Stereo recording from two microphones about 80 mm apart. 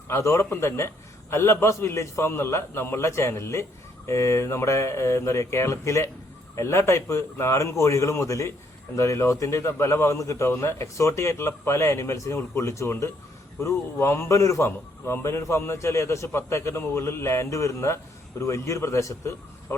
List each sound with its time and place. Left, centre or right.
0.1 s a man's voice: left